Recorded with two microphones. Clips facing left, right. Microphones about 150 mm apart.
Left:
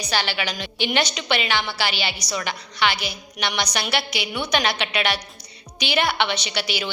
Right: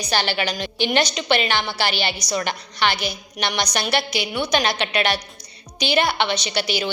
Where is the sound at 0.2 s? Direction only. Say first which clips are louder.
Right 3 dB; 45° right (ahead or behind).